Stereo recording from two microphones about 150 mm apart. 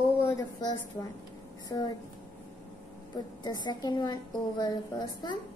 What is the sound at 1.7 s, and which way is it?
Speech, 25° left (ahead or behind).